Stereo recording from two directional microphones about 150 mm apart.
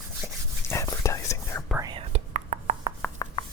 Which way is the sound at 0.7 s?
20° left (ahead or behind).